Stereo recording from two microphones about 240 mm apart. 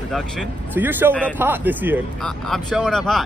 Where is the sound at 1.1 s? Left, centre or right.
Centre.